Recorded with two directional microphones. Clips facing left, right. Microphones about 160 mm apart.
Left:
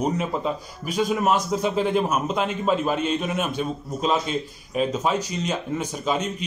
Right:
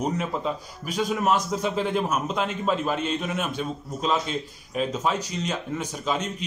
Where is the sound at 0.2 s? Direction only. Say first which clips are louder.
Left 2 dB; 5° left (ahead or behind).